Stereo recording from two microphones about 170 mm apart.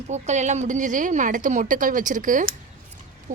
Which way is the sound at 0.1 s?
45° right (ahead or behind).